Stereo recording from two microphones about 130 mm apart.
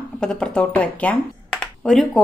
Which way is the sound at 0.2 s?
5° left (ahead or behind).